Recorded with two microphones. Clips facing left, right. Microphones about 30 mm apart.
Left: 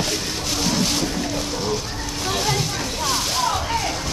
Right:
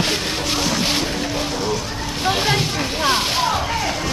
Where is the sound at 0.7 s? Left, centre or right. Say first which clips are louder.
Right 2 dB; right.